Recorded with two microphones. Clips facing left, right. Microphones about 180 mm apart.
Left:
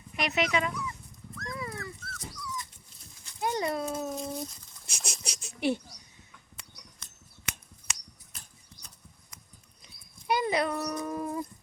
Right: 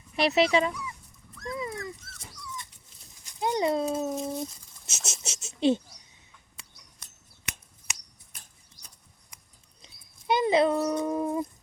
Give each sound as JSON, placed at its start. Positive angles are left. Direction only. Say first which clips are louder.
{"t": 0.2, "sound": "speech", "louder": "right 6 dB", "side_deg": -30}
{"t": 1.5, "sound": "dog", "louder": "right 5 dB", "side_deg": -20}
{"t": 3.2, "sound": "horse", "louder": "right 4 dB", "side_deg": -20}
{"t": 3.8, "sound": "a child's voice", "louder": "right 4 dB", "side_deg": 0}
{"t": 4.9, "sound": "speech", "louder": "right 1 dB", "side_deg": -25}
{"t": 9.8, "sound": "dog", "louder": "right 3 dB", "side_deg": -25}